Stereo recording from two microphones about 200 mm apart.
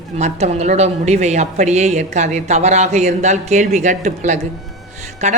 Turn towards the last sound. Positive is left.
turn(degrees=-35)  # may be behind; listen again after turning